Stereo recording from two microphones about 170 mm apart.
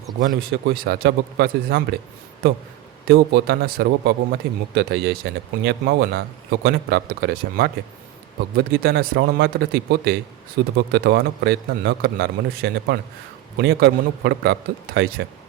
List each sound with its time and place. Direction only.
0.2 s speech: 60° right (ahead or behind)
3.1 s speech: 65° right (ahead or behind)
10.6 s speech: 90° right
10.9 s speech: 75° right (ahead or behind)